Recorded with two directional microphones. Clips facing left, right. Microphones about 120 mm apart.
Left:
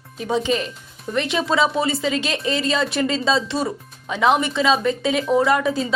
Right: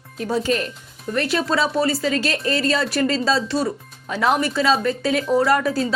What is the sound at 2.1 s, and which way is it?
Speech, 15° left (ahead or behind).